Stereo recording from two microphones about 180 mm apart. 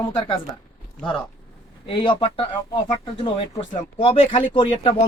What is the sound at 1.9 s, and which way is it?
Speech, 25° left (ahead or behind).